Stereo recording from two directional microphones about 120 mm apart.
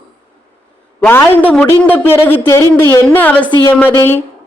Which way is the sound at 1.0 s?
15° left (ahead or behind).